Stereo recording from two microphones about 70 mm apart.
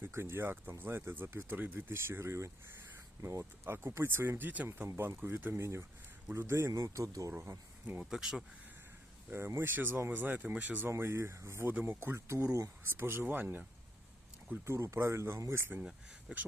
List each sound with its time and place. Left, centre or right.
0.0 s speech: right
6.8 s speech: right
8.1 s speech: centre
9.6 s speech: right
10.8 s speech: right
11.7 s speech: right
12.5 s speech: right
12.8 s speech: right
14.7 s speech: right
16.3 s speech: right